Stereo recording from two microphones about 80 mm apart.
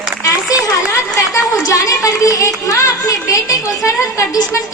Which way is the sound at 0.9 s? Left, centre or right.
Left.